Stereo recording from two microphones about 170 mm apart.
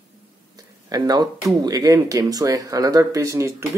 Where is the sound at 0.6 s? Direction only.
20° right (ahead or behind).